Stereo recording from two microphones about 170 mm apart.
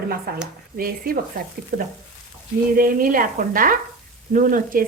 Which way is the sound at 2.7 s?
55° right (ahead or behind).